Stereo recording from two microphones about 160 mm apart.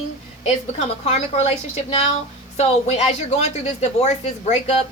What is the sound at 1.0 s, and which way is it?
A woman's voice, 45° left (ahead or behind).